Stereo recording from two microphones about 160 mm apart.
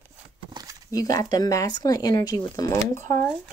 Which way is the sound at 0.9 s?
20° left (ahead or behind).